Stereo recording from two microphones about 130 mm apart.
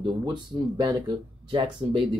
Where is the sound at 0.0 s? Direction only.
35° right (ahead or behind).